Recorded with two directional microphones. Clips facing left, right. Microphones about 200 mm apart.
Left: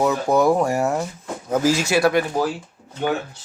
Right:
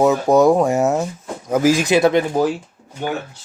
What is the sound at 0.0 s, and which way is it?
Speech, 20° right (ahead or behind).